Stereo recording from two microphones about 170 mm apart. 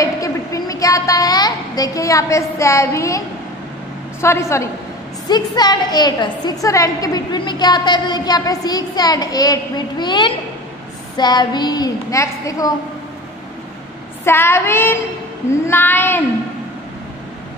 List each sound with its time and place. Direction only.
0.0 s a sound: 20° left (ahead or behind)
4.2 s child singing: 15° left (ahead or behind)
5.3 s a woman's voice: 25° left (ahead or behind)
14.2 s child singing: 15° left (ahead or behind)